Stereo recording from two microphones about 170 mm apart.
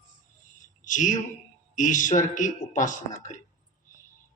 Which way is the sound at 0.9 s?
50° left (ahead or behind).